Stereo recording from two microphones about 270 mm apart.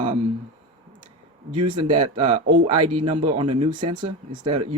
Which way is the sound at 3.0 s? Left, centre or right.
Right.